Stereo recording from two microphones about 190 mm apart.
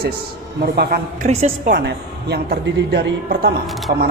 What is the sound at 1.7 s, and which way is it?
A woman's voice, 60° right (ahead or behind).